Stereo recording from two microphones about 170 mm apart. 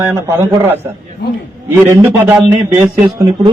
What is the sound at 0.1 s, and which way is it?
A man's voice, 10° right (ahead or behind).